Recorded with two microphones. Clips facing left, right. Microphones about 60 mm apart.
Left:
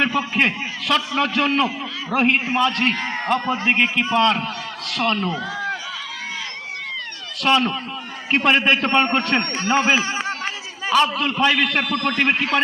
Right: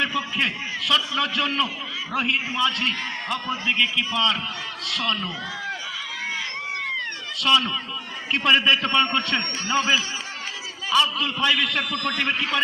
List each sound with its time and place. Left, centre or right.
0.0 s a sound: left
0.3 s a man's voice: left
7.4 s a man's voice: left